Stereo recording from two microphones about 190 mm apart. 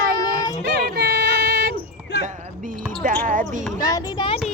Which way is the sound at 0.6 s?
60° right (ahead or behind).